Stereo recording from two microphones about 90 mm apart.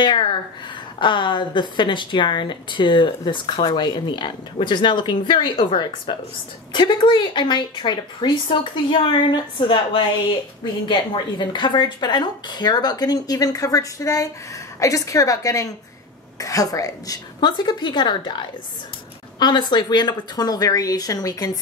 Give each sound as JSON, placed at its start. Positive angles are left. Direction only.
{"t": 0.0, "sound": "a woman's voice", "side_deg": 60}
{"t": 17.4, "sound": "a woman's voice", "side_deg": 55}